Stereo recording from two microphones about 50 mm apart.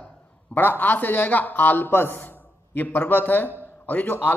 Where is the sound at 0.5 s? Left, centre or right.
Left.